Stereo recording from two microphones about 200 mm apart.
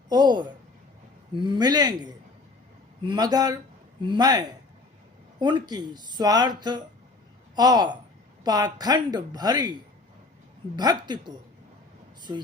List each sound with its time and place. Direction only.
0.1 s speech: 20° right (ahead or behind)
10.8 s speech: 20° right (ahead or behind)